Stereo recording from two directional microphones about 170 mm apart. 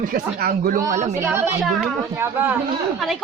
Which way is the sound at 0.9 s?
45° right (ahead or behind).